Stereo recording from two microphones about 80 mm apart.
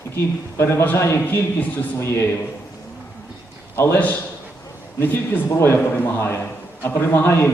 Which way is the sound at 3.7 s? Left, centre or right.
Left.